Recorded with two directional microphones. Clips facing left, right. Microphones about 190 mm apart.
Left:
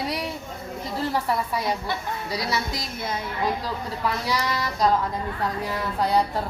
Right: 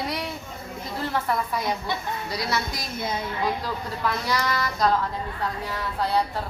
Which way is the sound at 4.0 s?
10° left (ahead or behind).